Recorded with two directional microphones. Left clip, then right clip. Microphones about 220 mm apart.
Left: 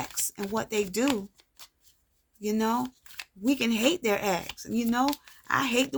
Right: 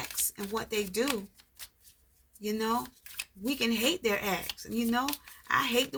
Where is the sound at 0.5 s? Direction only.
50° left (ahead or behind).